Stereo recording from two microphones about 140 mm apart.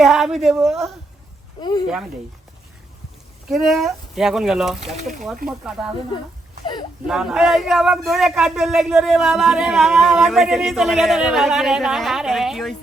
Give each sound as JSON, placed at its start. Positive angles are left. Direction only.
{"t": 0.0, "sound": "a man's voice", "side_deg": 0}
{"t": 1.6, "sound": "speech", "side_deg": 30}
{"t": 3.5, "sound": "a man's voice", "side_deg": 0}
{"t": 7.1, "sound": "a man's voice", "side_deg": -5}